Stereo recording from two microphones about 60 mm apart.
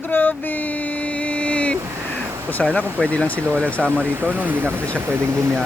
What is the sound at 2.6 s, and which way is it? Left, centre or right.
Speech, centre.